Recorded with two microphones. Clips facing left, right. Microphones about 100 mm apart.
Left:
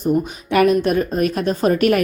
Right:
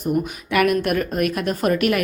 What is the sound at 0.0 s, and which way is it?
A woman's voice, 30° left (ahead or behind).